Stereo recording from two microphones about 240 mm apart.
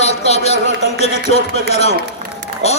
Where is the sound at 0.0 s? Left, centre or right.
Left.